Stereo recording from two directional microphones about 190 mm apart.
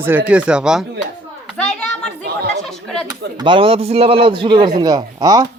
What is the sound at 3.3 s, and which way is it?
A man's voice, 25° right (ahead or behind).